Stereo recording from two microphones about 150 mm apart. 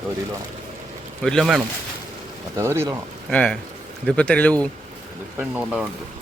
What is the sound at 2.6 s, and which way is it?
Speech, 20° right (ahead or behind).